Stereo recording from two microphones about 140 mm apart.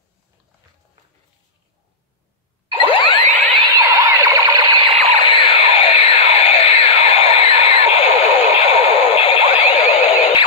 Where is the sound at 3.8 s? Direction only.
25° right (ahead or behind).